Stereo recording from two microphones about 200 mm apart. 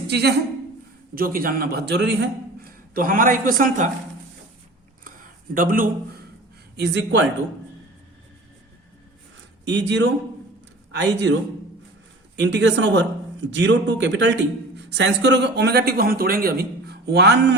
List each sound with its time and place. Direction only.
0.1 s a woman's voice: 55° right (ahead or behind)
2.6 s a man's voice: 45° right (ahead or behind)
5.5 s speech: 45° right (ahead or behind)
6.7 s speech: 60° right (ahead or behind)
9.6 s speech: 60° right (ahead or behind)
12.4 s speech: 60° right (ahead or behind)